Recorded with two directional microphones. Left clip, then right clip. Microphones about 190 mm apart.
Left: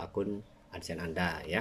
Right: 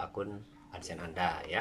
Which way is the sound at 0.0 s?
45° left (ahead or behind).